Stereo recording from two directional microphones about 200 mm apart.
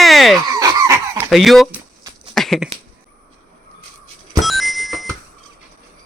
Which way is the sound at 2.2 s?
Centre (ahead or behind).